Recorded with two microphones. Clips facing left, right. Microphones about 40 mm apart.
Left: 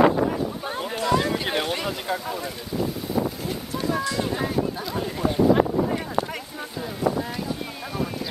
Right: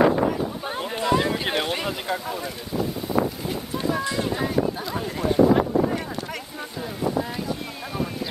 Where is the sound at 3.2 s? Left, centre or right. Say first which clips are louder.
Right 2 dB; right.